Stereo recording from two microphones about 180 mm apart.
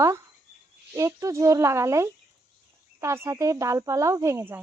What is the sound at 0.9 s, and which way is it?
Speech, 15° right (ahead or behind).